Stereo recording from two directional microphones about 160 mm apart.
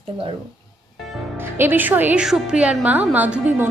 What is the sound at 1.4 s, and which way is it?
A woman's voice, 15° right (ahead or behind).